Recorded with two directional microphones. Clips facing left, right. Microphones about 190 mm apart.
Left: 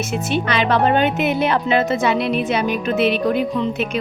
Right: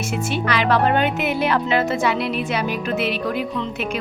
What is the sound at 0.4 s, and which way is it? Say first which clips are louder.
A woman's voice: even; 25° left (ahead or behind).